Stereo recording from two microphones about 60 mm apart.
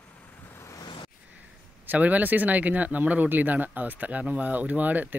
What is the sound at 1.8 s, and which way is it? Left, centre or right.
Speech, right.